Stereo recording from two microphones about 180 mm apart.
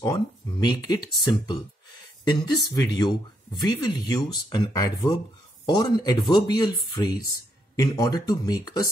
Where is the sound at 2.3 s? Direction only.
25° left (ahead or behind).